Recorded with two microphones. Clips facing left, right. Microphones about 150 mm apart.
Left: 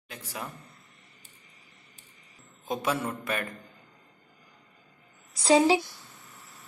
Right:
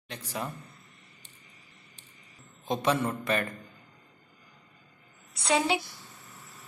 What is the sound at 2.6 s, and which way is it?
Speech, 5° left (ahead or behind).